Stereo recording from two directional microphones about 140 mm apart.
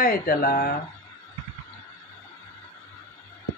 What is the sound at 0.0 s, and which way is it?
Speech, 90° left.